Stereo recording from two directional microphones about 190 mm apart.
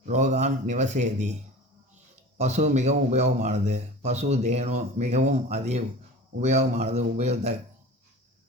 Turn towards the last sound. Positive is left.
turn(degrees=-35)  # may be behind; listen again after turning